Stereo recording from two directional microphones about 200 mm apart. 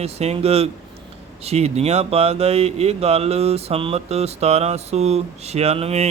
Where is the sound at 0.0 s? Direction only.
30° right (ahead or behind).